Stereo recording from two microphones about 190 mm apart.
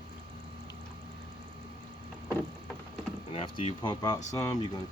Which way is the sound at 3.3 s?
30° left (ahead or behind).